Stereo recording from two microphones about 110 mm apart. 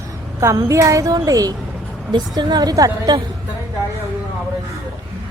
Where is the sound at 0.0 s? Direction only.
30° right (ahead or behind).